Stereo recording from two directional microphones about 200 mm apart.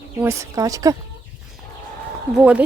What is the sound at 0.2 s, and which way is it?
Speech, 15° right (ahead or behind).